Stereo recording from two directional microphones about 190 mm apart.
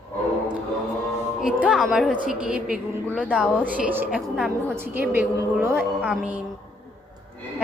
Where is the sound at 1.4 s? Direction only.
5° right (ahead or behind).